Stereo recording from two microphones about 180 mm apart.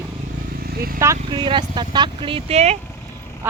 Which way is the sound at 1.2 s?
25° right (ahead or behind).